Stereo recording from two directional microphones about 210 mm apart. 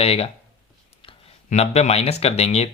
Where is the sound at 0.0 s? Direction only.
30° left (ahead or behind).